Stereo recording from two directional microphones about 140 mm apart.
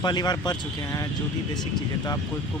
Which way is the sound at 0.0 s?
30° left (ahead or behind).